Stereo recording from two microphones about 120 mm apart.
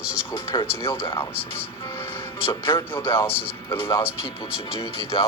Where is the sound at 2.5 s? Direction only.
45° left (ahead or behind).